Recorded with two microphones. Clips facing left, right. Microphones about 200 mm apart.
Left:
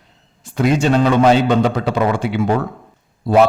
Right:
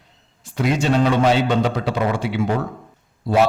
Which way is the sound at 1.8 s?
50° left (ahead or behind).